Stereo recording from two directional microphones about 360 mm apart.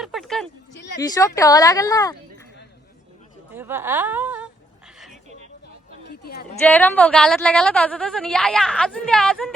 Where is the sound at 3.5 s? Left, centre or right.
Centre.